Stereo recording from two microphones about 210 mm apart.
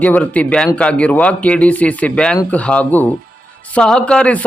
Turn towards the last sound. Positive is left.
turn(degrees=5)  # may be behind; listen again after turning